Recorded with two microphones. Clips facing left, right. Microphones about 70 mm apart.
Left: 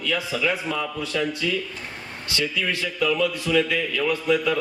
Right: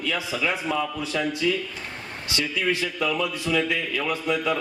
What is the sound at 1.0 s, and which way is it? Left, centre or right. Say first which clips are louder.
Speech: left 1 dB; right.